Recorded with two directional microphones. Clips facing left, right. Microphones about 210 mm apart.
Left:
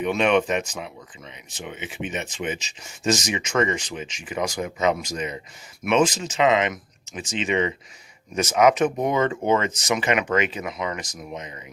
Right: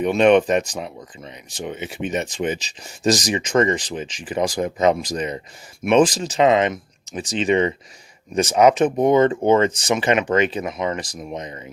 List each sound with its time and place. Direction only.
0.0 s speech: 40° right (ahead or behind)